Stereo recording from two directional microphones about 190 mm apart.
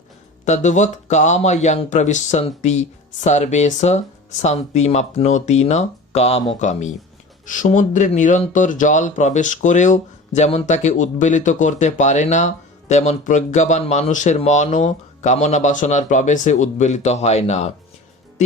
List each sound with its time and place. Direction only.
0.4 s speech: 40° left (ahead or behind)